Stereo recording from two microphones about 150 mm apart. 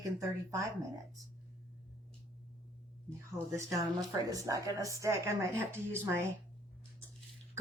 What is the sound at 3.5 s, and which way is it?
Speech, 20° right (ahead or behind).